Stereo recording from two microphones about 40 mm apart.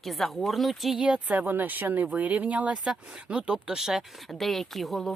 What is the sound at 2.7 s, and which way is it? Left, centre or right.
Speech, right.